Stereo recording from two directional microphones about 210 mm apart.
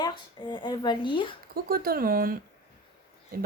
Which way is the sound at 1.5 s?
45° right (ahead or behind).